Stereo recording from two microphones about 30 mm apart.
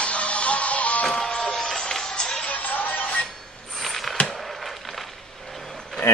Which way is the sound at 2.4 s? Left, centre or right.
Left.